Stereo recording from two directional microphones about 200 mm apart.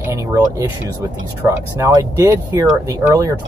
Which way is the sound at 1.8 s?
15° right (ahead or behind).